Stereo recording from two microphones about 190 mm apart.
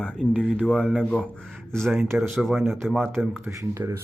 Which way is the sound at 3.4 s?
15° right (ahead or behind).